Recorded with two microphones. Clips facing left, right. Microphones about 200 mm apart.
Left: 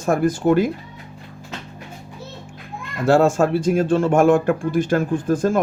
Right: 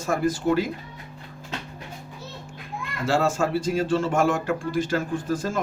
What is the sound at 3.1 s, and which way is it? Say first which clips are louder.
Speech: left 7 dB; 55° left (ahead or behind).